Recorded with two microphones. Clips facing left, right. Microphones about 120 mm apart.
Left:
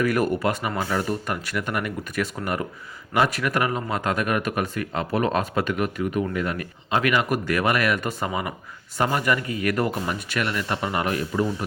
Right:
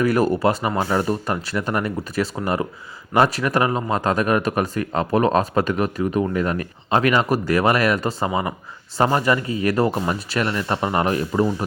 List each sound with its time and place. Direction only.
0.0 s speech: 35° right (ahead or behind)